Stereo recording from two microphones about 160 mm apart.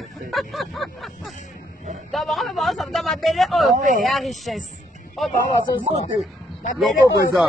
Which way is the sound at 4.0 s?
Centre (ahead or behind).